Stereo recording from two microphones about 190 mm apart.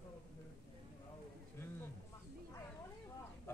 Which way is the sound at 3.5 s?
15° left (ahead or behind).